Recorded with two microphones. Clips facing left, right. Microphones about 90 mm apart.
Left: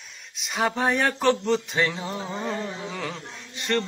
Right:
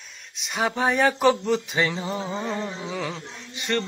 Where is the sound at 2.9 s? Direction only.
Centre (ahead or behind).